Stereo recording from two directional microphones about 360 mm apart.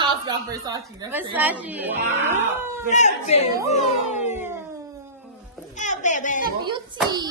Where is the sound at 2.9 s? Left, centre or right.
Centre.